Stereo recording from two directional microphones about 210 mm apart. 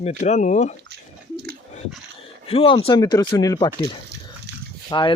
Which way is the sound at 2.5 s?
25° left (ahead or behind).